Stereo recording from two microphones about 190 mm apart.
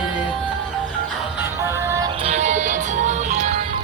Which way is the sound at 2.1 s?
35° right (ahead or behind).